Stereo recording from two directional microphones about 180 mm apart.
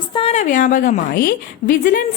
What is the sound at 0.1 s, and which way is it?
A woman's voice, 30° left (ahead or behind).